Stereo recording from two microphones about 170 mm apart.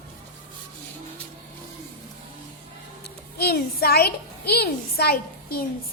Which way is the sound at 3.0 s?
70° left (ahead or behind).